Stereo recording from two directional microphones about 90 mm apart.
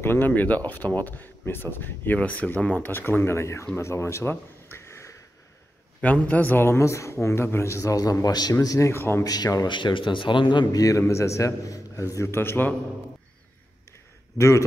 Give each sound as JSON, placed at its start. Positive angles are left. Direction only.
{"t": 0.0, "sound": "speech", "side_deg": 25}
{"t": 5.9, "sound": "a man's voice", "side_deg": 15}
{"t": 9.2, "sound": "speech", "side_deg": 45}
{"t": 9.7, "sound": "speech", "side_deg": 60}
{"t": 10.7, "sound": "a man's voice", "side_deg": 40}